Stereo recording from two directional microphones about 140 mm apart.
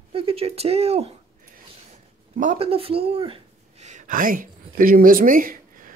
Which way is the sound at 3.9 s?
65° right (ahead or behind).